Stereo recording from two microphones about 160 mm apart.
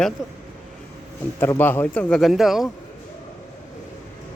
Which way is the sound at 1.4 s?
15° left (ahead or behind).